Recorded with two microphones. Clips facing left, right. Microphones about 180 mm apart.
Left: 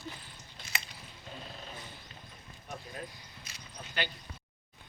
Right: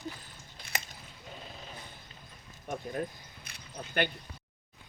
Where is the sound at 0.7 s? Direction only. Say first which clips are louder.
Right 2 dB; 60° right (ahead or behind).